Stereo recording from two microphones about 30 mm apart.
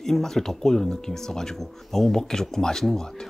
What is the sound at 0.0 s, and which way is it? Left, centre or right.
Speech, centre.